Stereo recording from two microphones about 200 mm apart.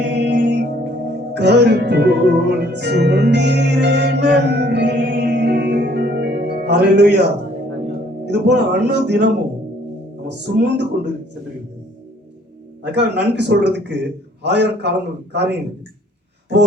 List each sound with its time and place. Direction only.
0.0 s music: 60° right (ahead or behind)
8.2 s speech: 60° right (ahead or behind)
12.8 s speech: 60° right (ahead or behind)